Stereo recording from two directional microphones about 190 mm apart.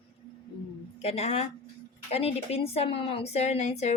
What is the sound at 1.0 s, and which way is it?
A woman's voice, 30° left (ahead or behind).